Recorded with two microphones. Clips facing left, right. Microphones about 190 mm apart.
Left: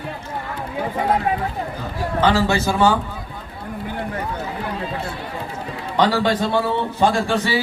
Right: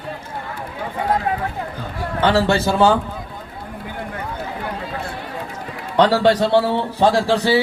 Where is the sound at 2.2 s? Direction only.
60° right (ahead or behind).